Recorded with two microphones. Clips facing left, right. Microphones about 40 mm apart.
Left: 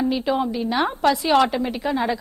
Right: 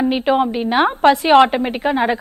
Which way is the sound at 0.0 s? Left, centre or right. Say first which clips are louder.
Right 5 dB; right.